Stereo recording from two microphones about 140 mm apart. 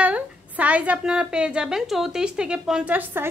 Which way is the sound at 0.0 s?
10° right (ahead or behind).